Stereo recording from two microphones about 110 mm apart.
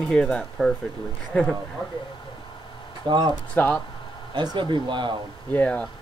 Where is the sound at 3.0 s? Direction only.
45° right (ahead or behind).